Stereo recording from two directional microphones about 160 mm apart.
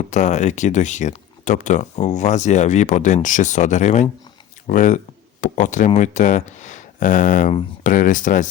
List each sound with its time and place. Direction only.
0.1 s speech: 50° left (ahead or behind)